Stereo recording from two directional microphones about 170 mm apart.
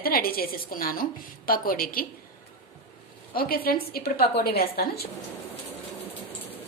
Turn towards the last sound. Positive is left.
turn(degrees=65)  # may be behind; listen again after turning